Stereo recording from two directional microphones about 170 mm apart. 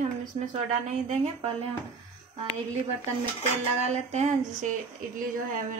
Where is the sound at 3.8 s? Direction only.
40° right (ahead or behind).